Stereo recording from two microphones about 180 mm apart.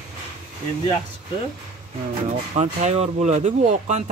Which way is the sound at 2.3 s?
40° right (ahead or behind).